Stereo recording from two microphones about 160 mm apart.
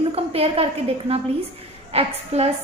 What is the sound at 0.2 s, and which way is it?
A woman's voice, 40° right (ahead or behind).